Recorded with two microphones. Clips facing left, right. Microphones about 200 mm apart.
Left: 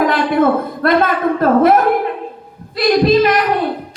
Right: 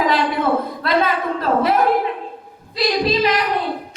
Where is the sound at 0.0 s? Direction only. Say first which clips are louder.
Left 5 dB; 50° left (ahead or behind).